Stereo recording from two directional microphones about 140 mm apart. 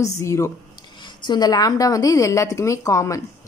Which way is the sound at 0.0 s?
20° left (ahead or behind).